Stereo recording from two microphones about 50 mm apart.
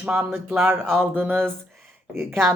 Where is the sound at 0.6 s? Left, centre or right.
Right.